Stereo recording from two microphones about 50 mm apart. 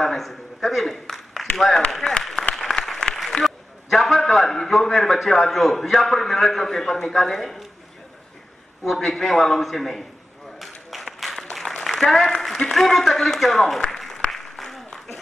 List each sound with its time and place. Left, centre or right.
0.0 s a sound: centre
1.9 s a man's voice: centre
2.5 s applause: centre
3.4 s a man's voice: centre
8.8 s a man's voice: centre
10.6 s a sound: centre
11.1 s applause: centre